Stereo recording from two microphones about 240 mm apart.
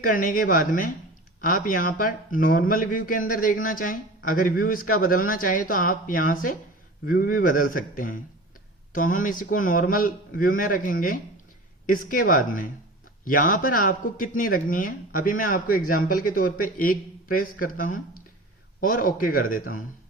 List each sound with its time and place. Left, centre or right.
0.0 s a man's voice: left